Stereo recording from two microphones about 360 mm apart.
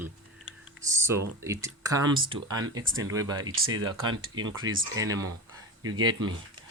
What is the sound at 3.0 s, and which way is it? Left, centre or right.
Speech, centre.